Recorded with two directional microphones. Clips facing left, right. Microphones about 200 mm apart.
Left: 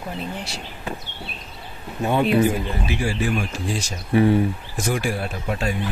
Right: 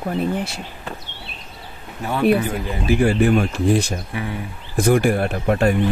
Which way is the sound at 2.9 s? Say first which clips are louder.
Right 9 dB; 60° right (ahead or behind).